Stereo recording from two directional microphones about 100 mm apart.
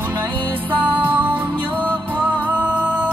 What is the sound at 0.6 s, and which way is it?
Music, 15° right (ahead or behind).